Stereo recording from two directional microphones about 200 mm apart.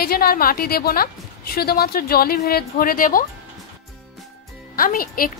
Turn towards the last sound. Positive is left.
turn(degrees=45)  # may be behind; listen again after turning